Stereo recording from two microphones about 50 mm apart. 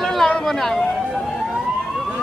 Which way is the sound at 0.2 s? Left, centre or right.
Centre.